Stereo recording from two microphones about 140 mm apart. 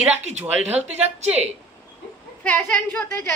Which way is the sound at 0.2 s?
55° right (ahead or behind).